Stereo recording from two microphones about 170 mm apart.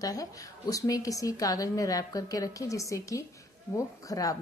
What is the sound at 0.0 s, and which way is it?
A woman's voice, 20° left (ahead or behind).